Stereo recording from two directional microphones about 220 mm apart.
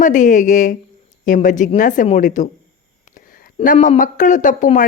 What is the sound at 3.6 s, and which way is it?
Speech, 30° left (ahead or behind).